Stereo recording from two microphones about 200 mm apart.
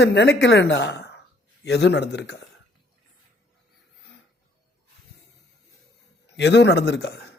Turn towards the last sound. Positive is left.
turn(degrees=55)  # may be behind; listen again after turning